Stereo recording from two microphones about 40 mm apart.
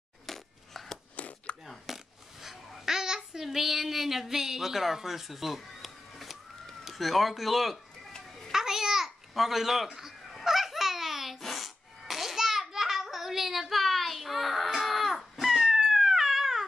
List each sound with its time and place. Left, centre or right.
0.3 s a sound: centre
1.1 s chopping: left
1.9 s coin: centre
2.4 s babbling: centre
3.4 s speech: centre
8.5 s babbling: centre
10.4 s baby laughter: centre
11.5 s a sound: centre
15.1 s cat: centre